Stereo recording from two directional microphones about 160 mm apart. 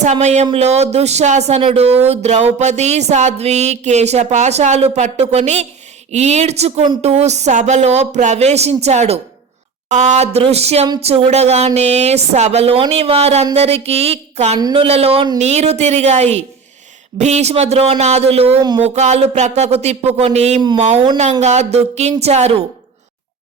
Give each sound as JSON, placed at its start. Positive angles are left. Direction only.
{"t": 0.0, "sound": "a woman's voice", "side_deg": -45}
{"t": 14.6, "sound": "a woman's voice", "side_deg": -30}
{"t": 20.6, "sound": "speech", "side_deg": -30}
{"t": 21.4, "sound": "a woman's voice", "side_deg": -45}